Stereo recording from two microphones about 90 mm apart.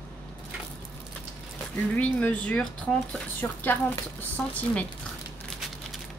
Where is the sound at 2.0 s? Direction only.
15° left (ahead or behind).